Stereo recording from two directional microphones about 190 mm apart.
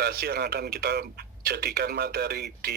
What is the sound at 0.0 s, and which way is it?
Speech, 55° right (ahead or behind).